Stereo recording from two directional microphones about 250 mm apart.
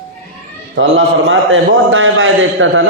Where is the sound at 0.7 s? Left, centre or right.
Right.